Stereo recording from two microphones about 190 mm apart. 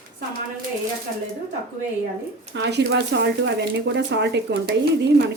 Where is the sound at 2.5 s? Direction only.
65° right (ahead or behind).